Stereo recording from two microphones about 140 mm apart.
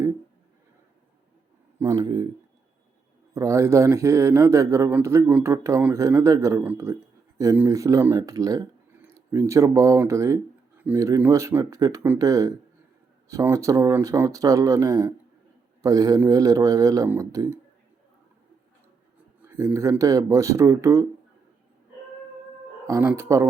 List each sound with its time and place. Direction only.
1.8 s speech: 25° right (ahead or behind)
3.3 s speech: 20° right (ahead or behind)
19.5 s speech: 20° right (ahead or behind)
22.9 s speech: 20° right (ahead or behind)